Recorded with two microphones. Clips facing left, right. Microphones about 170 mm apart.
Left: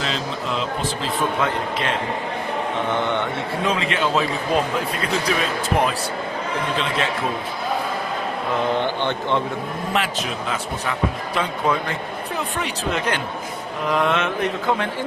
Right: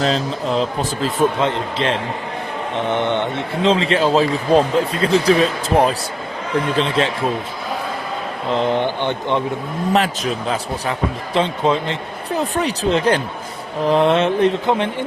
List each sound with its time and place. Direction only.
0.0 s a man's voice: 35° right (ahead or behind)
1.4 s a man's voice: 25° right (ahead or behind)
8.5 s a man's voice: 20° right (ahead or behind)
9.9 s a man's voice: 35° right (ahead or behind)
12.4 s a man's voice: 35° right (ahead or behind); by 15.0 s 20° right (ahead or behind)